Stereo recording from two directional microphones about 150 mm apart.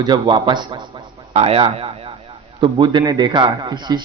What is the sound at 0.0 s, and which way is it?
A man's voice, 30° right (ahead or behind).